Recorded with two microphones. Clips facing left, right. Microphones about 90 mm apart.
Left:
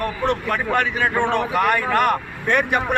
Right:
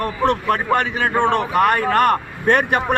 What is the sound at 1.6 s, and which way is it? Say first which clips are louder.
Speech: right 4 dB; 45° right (ahead or behind).